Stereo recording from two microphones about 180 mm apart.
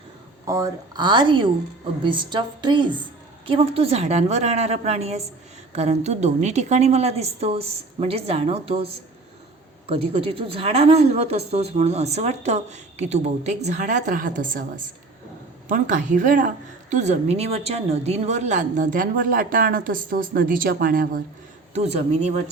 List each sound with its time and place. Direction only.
0.4 s speech: 20° right (ahead or behind); by 14.6 s 50° right (ahead or behind)
15.7 s a woman's voice: 45° right (ahead or behind)
21.8 s speech: 35° right (ahead or behind)